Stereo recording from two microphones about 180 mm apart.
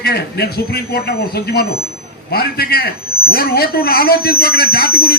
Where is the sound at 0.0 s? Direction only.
60° left (ahead or behind).